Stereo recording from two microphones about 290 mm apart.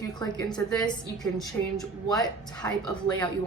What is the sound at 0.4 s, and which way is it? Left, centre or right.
Speech, centre.